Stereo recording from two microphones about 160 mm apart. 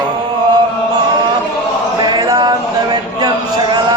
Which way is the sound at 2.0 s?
25° right (ahead or behind).